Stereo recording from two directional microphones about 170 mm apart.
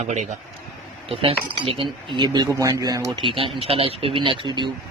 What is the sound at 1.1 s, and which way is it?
Speech, 35° right (ahead or behind).